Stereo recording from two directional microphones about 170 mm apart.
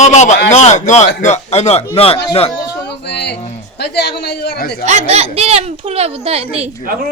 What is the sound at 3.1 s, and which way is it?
A man's voice, 80° left.